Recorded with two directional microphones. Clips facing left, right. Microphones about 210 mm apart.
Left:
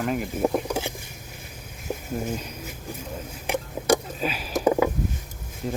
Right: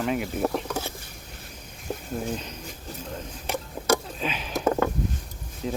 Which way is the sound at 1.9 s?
5° left (ahead or behind).